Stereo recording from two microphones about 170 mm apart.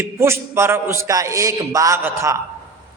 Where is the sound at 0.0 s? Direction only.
15° right (ahead or behind).